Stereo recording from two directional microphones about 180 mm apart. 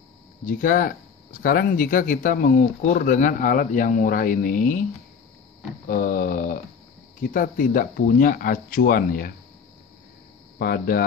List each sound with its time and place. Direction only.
0.5 s speech: 50° left (ahead or behind)
5.9 s speech: 50° left (ahead or behind)
10.6 s speech: 55° left (ahead or behind)